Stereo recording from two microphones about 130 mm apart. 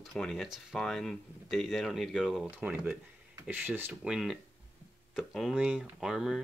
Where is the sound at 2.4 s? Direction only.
15° right (ahead or behind).